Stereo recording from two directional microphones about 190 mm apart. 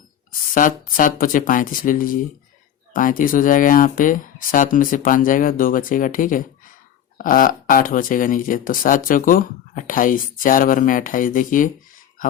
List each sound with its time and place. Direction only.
0.5 s speech: 45° left (ahead or behind)